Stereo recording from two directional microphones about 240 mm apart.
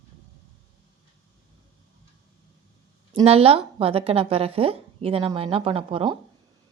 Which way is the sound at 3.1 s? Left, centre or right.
Right.